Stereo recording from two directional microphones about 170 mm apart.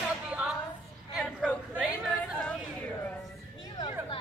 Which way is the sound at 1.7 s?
5° right (ahead or behind).